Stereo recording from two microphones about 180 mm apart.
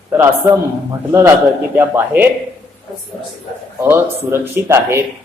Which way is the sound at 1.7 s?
10° right (ahead or behind).